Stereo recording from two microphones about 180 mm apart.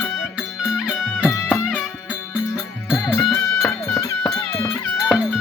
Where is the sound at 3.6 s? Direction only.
15° left (ahead or behind).